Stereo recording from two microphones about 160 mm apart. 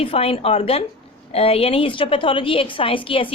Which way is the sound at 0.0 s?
35° left (ahead or behind).